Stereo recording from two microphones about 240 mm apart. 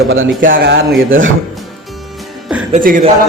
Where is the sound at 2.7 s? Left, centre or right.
Right.